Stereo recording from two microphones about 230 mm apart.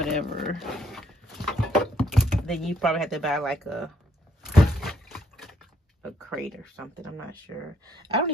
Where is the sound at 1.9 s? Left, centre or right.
Centre.